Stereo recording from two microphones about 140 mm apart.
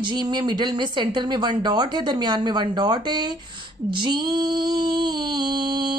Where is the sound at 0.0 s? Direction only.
30° right (ahead or behind).